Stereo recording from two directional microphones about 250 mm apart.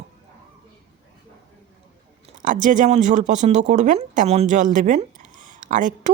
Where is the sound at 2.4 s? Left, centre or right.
Right.